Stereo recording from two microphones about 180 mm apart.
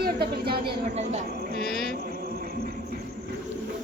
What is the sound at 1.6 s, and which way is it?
Mantra, 60° left (ahead or behind).